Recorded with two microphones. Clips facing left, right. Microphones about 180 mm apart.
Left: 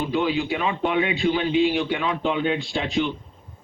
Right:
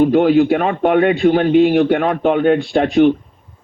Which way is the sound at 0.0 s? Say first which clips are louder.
Right 12 dB; 55° right (ahead or behind).